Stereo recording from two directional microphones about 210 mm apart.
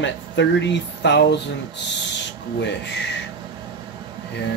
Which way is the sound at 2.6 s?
55° left (ahead or behind).